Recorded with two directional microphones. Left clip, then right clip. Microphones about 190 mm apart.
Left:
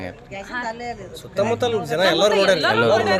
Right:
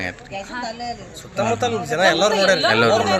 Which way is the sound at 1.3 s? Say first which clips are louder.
Even; 90° left.